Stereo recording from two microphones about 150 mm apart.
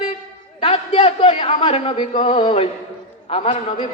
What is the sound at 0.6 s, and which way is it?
A man's voice, 40° left (ahead or behind).